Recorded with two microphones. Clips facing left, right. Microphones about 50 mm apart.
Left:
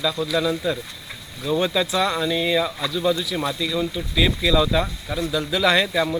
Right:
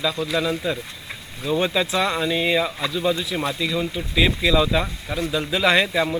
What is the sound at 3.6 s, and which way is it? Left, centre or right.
Speech, right.